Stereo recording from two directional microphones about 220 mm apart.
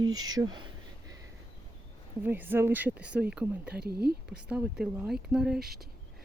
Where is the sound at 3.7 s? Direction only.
45° right (ahead or behind).